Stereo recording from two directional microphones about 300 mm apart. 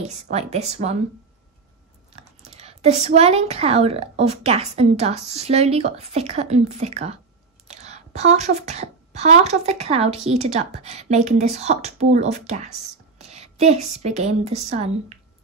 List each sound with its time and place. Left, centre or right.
0.1 s a woman's voice: right
2.1 s a woman's voice: right
13.2 s a sound: right
13.9 s a woman's voice: right